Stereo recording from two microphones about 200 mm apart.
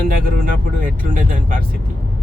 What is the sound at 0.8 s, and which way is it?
Speech, 45° right (ahead or behind).